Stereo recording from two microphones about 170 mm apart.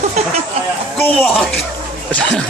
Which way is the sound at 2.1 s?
5° left (ahead or behind).